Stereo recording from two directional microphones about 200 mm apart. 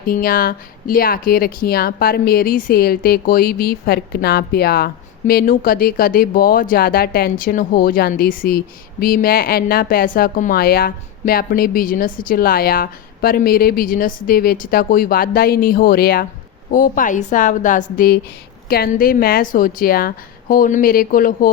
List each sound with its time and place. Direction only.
0.1 s a woman's voice: 45° left (ahead or behind)